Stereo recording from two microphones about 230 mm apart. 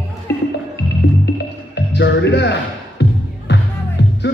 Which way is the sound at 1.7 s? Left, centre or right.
Left.